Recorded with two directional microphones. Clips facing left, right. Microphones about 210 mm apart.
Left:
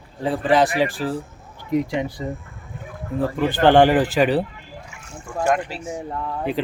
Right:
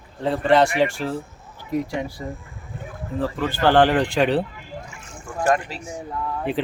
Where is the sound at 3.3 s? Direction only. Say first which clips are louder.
Left 3 dB; 15° left (ahead or behind).